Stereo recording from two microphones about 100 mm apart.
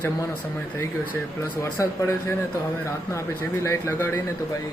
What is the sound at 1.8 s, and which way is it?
Speech, 30° left (ahead or behind).